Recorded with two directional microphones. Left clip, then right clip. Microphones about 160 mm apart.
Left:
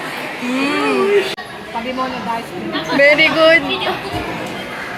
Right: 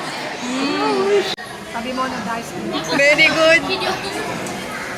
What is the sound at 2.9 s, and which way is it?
Speech, 30° left (ahead or behind).